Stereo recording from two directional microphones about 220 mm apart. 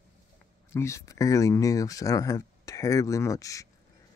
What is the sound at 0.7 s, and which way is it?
Speech, 15° left (ahead or behind).